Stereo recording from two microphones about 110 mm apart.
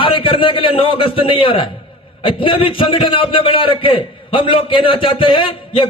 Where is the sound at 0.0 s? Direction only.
50° left (ahead or behind).